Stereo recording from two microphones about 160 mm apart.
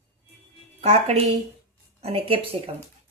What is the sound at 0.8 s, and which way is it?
A woman's voice, 40° right (ahead or behind).